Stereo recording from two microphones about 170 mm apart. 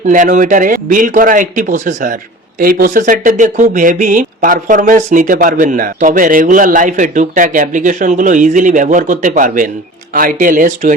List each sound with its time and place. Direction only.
0.0 s speech: 50° right (ahead or behind)